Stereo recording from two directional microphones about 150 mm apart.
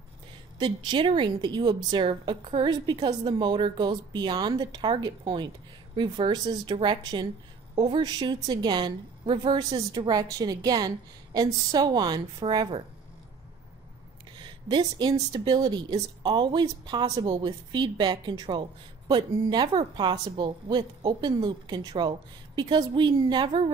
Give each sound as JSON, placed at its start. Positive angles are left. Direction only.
{"t": 0.6, "sound": "a woman's voice", "side_deg": -30}
{"t": 14.4, "sound": "a woman's voice", "side_deg": -30}